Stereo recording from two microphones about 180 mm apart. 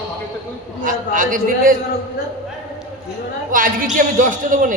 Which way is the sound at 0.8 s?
50° right (ahead or behind).